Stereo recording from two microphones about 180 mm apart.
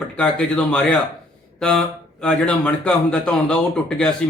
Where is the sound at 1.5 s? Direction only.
5° left (ahead or behind).